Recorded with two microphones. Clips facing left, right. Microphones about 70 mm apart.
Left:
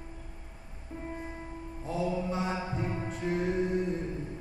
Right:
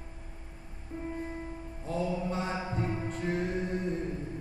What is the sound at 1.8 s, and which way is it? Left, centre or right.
Mantra, centre.